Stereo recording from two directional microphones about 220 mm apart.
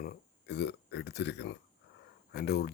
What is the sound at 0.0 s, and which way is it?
Speech, 50° left (ahead or behind).